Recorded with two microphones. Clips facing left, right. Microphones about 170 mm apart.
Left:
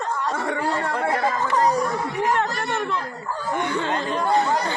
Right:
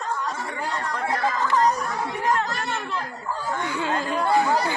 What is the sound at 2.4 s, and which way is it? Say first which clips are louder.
Chatter: left 3 dB; 65° left (ahead or behind).